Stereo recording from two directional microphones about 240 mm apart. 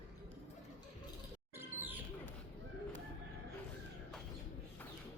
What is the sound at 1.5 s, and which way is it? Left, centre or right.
Bird, centre.